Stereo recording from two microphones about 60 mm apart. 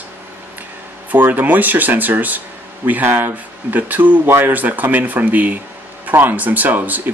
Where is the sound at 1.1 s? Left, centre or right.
Right.